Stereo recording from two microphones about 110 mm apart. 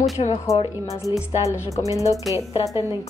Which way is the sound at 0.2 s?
65° left (ahead or behind).